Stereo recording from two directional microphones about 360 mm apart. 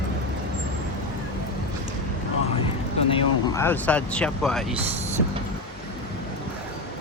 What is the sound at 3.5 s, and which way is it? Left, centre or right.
Speech, centre.